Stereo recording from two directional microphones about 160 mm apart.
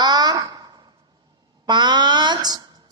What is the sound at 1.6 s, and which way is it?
Speech, 30° right (ahead or behind).